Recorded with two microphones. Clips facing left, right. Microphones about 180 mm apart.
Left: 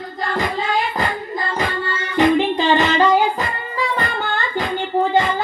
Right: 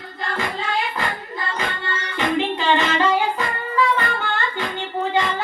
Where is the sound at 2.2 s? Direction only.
40° left (ahead or behind).